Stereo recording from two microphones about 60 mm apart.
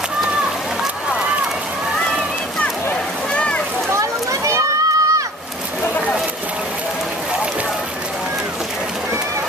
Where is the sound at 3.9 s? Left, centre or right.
Right.